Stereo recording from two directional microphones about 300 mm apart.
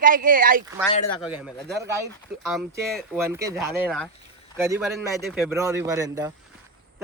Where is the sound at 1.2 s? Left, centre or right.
Centre.